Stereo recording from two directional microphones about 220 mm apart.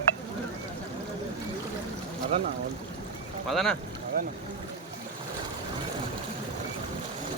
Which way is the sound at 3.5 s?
Centre (ahead or behind).